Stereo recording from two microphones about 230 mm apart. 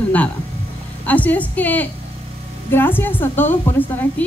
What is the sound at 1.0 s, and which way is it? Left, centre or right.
A woman's voice, centre.